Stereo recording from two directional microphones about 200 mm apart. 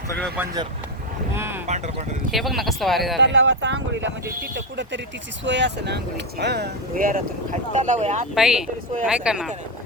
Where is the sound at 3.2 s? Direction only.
60° right (ahead or behind); by 8.2 s 35° right (ahead or behind).